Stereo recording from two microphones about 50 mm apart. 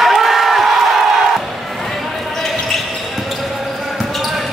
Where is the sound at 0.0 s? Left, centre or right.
Centre.